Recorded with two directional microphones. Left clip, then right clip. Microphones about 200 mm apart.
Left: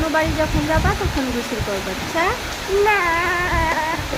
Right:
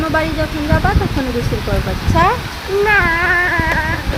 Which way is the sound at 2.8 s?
30° right (ahead or behind).